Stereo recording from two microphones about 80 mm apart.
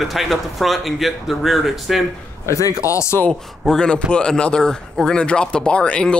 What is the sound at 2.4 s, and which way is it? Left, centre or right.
Speech, left.